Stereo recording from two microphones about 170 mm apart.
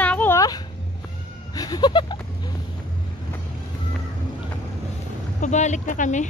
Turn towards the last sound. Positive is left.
turn(degrees=45)  # may be behind; listen again after turning